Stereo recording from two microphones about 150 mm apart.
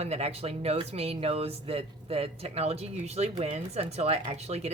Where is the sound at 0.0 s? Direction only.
45° right (ahead or behind).